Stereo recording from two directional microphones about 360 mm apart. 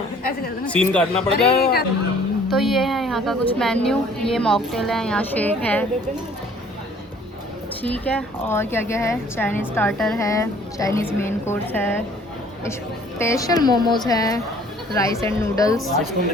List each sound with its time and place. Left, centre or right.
0.7 s a woman's voice: centre
1.5 s speech: left
2.5 s a woman's voice: centre
7.8 s speech: centre
13.1 s speech: centre